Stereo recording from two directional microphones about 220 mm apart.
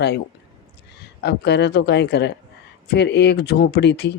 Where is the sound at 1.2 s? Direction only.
50° left (ahead or behind).